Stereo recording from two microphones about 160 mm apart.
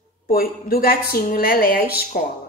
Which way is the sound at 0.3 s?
65° left (ahead or behind).